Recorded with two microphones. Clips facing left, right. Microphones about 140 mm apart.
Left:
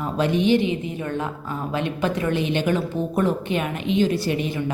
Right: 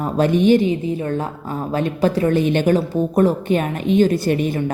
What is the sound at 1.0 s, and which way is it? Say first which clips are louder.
A woman's voice: right 4 dB; 35° right (ahead or behind).